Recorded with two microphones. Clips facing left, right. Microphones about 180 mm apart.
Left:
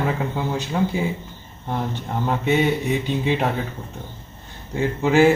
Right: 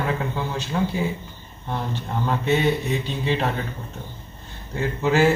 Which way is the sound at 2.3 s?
15° left (ahead or behind).